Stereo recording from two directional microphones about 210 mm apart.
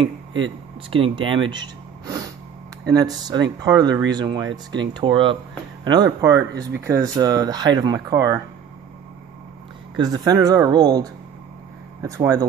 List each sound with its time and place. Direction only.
0.8 s speech: 25° right (ahead or behind)
9.9 s speech: 20° right (ahead or behind)